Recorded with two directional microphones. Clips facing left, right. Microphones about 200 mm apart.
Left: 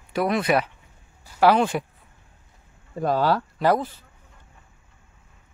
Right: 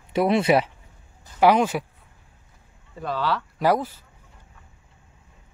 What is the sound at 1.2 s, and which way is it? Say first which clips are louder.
Speech: even; 15° right (ahead or behind).